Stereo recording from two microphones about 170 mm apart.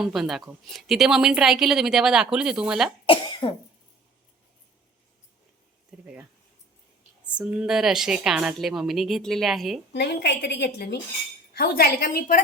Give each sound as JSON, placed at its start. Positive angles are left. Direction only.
{"t": 0.0, "sound": "a woman's voice", "side_deg": 0}
{"t": 3.4, "sound": "cough", "side_deg": 30}
{"t": 7.3, "sound": "a woman's voice", "side_deg": -5}
{"t": 9.9, "sound": "a woman's voice", "side_deg": 75}